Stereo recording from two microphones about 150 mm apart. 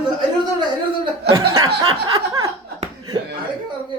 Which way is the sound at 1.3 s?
20° right (ahead or behind).